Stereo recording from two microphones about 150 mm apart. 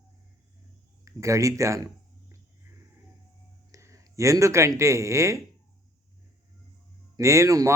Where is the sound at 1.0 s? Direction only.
20° right (ahead or behind).